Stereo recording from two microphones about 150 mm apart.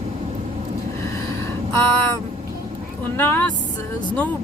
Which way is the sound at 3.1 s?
15° left (ahead or behind).